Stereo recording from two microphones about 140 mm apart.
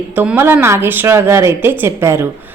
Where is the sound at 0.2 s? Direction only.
15° right (ahead or behind).